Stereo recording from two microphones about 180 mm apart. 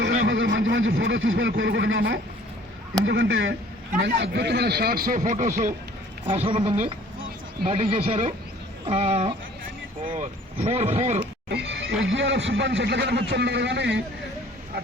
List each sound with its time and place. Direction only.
0.5 s a sound: 90° right
1.0 s speech: 90° right
4.0 s a man's voice: 70° right (ahead or behind); by 5.7 s 45° right (ahead or behind)
6.2 s speech: 30° right (ahead or behind)
11.4 s speech: 70° right (ahead or behind)